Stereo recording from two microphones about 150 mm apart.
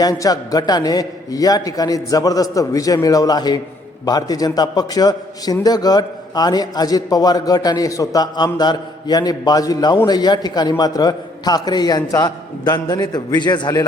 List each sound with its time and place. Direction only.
0.0 s a man's voice: 25° left (ahead or behind)